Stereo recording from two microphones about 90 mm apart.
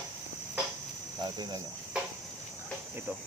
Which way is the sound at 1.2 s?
50° right (ahead or behind).